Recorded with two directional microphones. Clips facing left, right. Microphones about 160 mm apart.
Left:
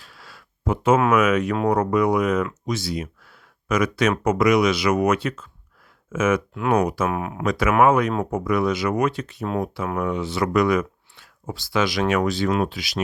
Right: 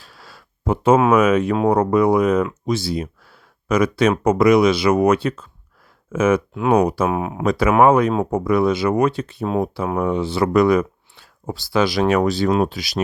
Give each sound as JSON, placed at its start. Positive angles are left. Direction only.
{"t": 0.0, "sound": "speech", "side_deg": -35}